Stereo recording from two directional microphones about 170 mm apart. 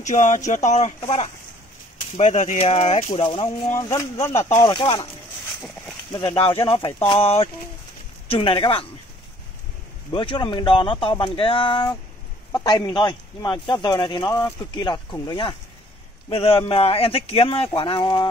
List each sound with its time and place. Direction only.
0.0 s speech: 45° left (ahead or behind)
2.0 s speech: 45° left (ahead or behind)
3.7 s speech: 15° left (ahead or behind)
4.7 s speech: 30° left (ahead or behind)
6.3 s speech: 35° left (ahead or behind)
8.3 s speech: 30° left (ahead or behind)
10.1 s speech: 30° left (ahead or behind)